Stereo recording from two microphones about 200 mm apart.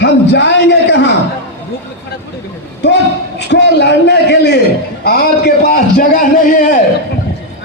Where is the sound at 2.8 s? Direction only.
60° left (ahead or behind).